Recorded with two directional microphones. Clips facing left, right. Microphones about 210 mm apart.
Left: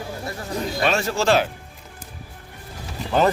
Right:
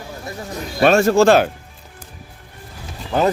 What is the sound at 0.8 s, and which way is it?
Speech, 50° right (ahead or behind).